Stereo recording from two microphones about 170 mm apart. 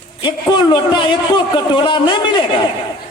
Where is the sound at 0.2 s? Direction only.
30° left (ahead or behind).